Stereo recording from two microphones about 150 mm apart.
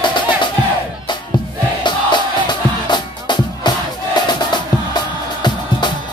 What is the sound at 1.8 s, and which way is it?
Music, 30° left (ahead or behind).